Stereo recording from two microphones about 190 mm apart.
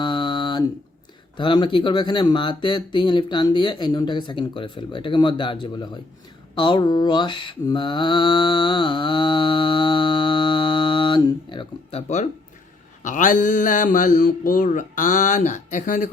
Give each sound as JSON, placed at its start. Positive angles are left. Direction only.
{"t": 0.0, "sound": "a sound", "side_deg": 25}
{"t": 1.4, "sound": "speech", "side_deg": 25}
{"t": 6.6, "sound": "mantra", "side_deg": 25}
{"t": 13.1, "sound": "speech", "side_deg": 40}